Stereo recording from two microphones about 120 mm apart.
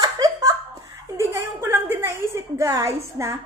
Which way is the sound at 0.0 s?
30° right (ahead or behind).